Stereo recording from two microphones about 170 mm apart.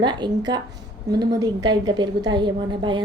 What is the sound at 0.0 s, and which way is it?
Speech, 25° right (ahead or behind).